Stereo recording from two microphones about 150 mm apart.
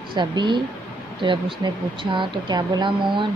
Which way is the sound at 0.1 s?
30° right (ahead or behind).